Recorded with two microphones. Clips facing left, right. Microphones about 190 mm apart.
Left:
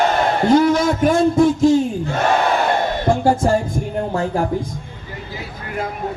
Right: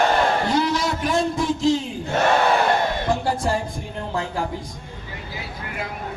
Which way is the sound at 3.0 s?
45° left (ahead or behind).